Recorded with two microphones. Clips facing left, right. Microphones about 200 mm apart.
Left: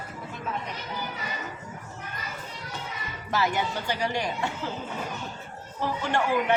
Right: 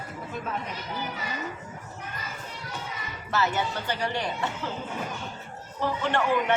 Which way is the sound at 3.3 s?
15° left (ahead or behind).